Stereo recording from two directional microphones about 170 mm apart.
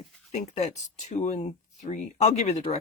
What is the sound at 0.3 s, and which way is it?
Speech, 40° left (ahead or behind).